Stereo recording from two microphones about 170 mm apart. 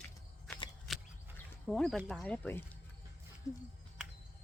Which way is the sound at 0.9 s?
Centre (ahead or behind).